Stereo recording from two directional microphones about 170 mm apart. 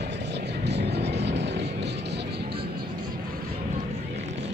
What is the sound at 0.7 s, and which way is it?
Music, 85° right.